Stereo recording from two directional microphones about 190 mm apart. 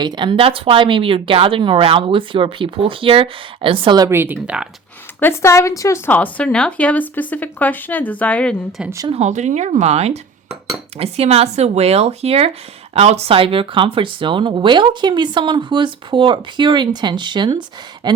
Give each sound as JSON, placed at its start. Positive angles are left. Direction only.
{"t": 0.0, "sound": "speech", "side_deg": -25}
{"t": 5.2, "sound": "speech", "side_deg": 15}
{"t": 8.8, "sound": "speech", "side_deg": -15}
{"t": 9.0, "sound": "speech", "side_deg": -35}